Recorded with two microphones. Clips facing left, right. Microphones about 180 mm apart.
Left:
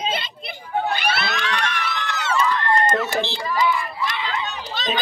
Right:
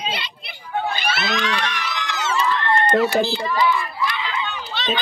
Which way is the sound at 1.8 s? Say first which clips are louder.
Even; 55° left (ahead or behind).